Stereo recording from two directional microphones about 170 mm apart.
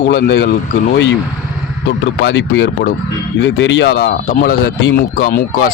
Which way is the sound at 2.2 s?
90° left.